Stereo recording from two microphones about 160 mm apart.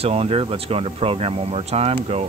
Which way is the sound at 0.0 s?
40° right (ahead or behind).